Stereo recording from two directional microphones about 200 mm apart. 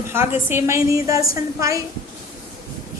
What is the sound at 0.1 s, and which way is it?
A woman's voice, 10° right (ahead or behind).